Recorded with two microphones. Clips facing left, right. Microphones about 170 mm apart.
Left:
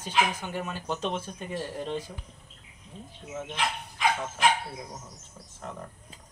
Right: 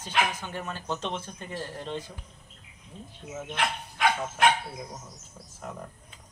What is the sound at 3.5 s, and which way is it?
Speech, 65° right (ahead or behind).